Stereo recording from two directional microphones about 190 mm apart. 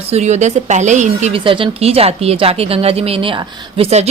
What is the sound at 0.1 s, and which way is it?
A woman's voice, 35° right (ahead or behind).